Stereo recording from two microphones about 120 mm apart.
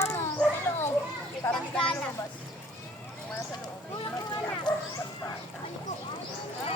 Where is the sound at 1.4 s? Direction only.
25° left (ahead or behind).